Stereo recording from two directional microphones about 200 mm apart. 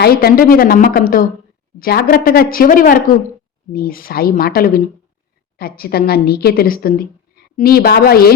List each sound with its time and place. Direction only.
0.0 s a woman's voice: 50° left (ahead or behind)